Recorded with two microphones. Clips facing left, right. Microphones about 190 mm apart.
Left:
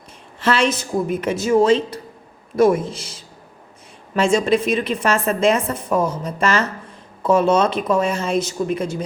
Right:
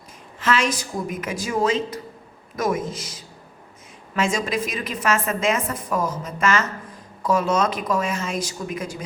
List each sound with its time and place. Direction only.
0.3 s a woman's voice: 30° left (ahead or behind)